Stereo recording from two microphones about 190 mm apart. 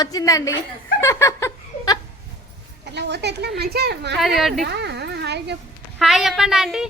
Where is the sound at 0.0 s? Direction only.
20° left (ahead or behind).